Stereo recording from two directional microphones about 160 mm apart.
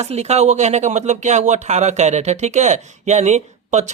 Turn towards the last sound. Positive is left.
turn(degrees=-45)  # may be behind; listen again after turning